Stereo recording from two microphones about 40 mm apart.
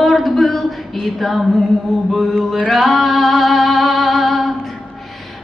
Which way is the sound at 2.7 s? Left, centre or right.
Centre.